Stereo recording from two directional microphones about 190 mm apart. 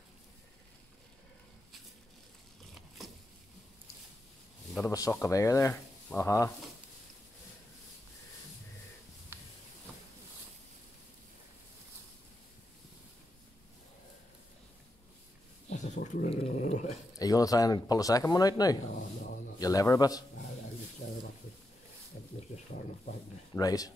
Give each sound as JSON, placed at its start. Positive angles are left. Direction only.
{"t": 4.8, "sound": "speech", "side_deg": 15}
{"t": 9.3, "sound": "a sound", "side_deg": -10}
{"t": 15.8, "sound": "dog", "side_deg": 40}
{"t": 17.2, "sound": "speech", "side_deg": 20}
{"t": 23.5, "sound": "speech", "side_deg": 20}